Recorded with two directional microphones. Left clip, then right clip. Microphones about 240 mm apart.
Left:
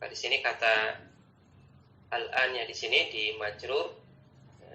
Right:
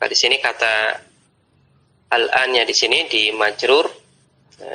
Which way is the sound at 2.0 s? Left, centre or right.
Right.